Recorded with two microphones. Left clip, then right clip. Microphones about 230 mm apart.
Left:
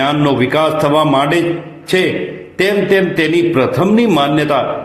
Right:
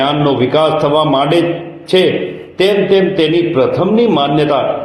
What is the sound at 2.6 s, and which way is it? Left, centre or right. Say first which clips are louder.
A man's voice: right 2 dB; left.